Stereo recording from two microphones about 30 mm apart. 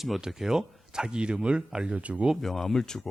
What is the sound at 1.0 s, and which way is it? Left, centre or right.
Speech, right.